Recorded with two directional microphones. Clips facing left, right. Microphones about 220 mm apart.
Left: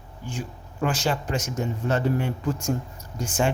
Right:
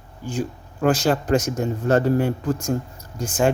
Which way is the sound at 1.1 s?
40° right (ahead or behind).